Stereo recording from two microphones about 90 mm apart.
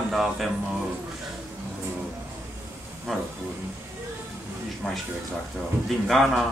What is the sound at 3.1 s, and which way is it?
Speech, centre (ahead or behind).